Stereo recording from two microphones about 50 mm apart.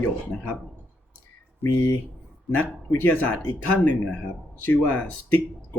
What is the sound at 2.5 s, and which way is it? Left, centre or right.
Speech, left.